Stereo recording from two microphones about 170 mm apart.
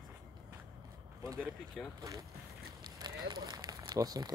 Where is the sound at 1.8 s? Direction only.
Centre (ahead or behind).